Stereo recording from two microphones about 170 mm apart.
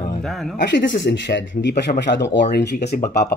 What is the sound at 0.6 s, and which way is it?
Speech, 90° left.